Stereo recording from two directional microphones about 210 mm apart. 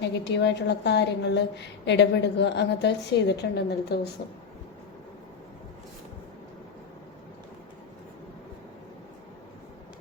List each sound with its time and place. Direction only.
0.0 s a woman's voice: 55° left (ahead or behind)